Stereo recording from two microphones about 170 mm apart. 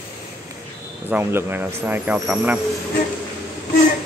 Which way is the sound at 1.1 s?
15° right (ahead or behind).